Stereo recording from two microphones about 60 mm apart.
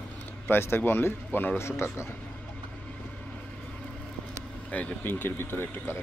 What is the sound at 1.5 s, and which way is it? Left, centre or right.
Speech, left.